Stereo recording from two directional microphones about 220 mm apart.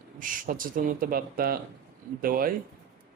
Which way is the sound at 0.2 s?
40° right (ahead or behind).